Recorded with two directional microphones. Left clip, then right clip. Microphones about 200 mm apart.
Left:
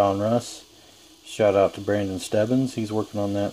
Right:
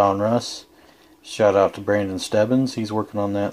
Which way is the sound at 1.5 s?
Centre (ahead or behind).